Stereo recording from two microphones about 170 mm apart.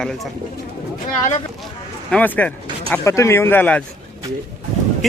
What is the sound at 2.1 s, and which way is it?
Speech, 10° left (ahead or behind).